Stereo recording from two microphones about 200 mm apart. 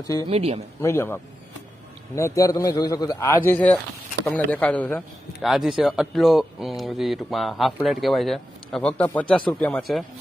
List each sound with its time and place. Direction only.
0.0 s a man's voice: 15° left (ahead or behind)
0.3 s speech: 30° right (ahead or behind)
0.7 s a man's voice: 10° left (ahead or behind)